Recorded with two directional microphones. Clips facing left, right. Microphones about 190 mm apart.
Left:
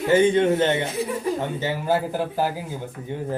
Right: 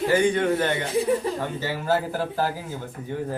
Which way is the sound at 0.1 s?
25° left (ahead or behind).